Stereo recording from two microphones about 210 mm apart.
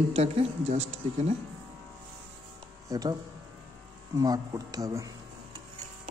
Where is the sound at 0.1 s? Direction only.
30° right (ahead or behind).